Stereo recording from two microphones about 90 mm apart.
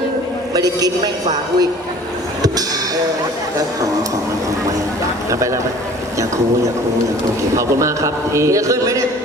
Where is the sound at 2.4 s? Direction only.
45° right (ahead or behind).